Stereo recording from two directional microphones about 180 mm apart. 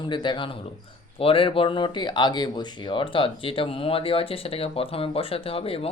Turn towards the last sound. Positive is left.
turn(degrees=30)  # may be behind; listen again after turning